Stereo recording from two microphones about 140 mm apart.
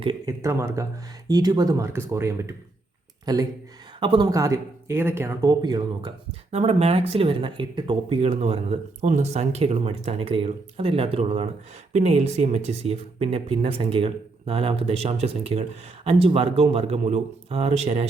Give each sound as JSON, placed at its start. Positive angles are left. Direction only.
{"t": 0.3, "sound": "speech", "side_deg": -20}
{"t": 4.3, "sound": "speech", "side_deg": -20}
{"t": 5.5, "sound": "speech", "side_deg": -30}
{"t": 6.5, "sound": "speech", "side_deg": -50}
{"t": 8.2, "sound": "speech", "side_deg": -50}